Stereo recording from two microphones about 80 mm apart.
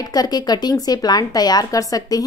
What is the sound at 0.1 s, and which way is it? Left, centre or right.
A woman's voice, left.